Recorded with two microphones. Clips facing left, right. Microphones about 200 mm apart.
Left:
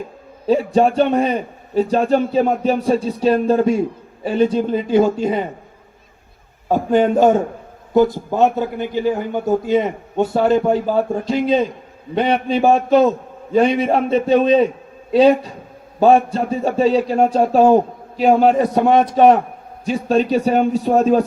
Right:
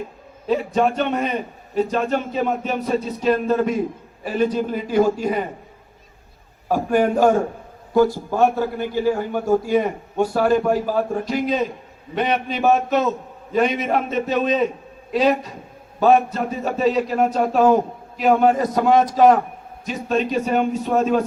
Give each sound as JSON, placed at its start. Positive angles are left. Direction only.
{"t": 0.4, "sound": "a man's voice", "side_deg": 30}
{"t": 6.7, "sound": "a man's voice", "side_deg": 20}
{"t": 18.9, "sound": "a man's voice", "side_deg": 60}
{"t": 19.8, "sound": "a man's voice", "side_deg": 30}